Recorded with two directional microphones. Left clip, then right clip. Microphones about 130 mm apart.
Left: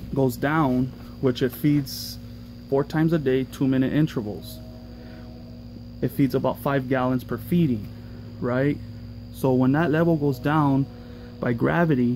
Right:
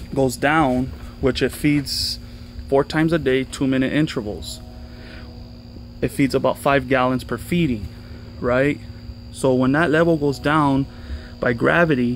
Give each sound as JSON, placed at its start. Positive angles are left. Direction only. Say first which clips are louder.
{"t": 0.2, "sound": "speech", "louder": "right 5 dB", "side_deg": -15}
{"t": 5.9, "sound": "speech", "louder": "right 4 dB", "side_deg": -20}